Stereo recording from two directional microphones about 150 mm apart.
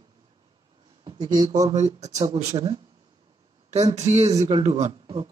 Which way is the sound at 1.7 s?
50° right (ahead or behind).